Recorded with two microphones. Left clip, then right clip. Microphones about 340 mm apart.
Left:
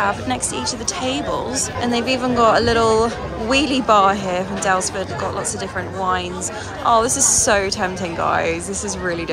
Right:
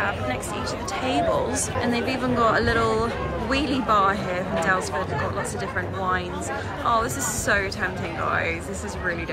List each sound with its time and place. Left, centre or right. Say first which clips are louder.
1.0 s speech: right 1 dB; centre
6.9 s speech: left 8 dB; centre